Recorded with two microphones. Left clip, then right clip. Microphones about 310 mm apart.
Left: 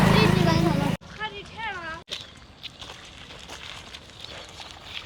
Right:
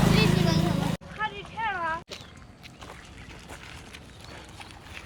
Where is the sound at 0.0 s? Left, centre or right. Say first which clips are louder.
Left 4 dB; centre.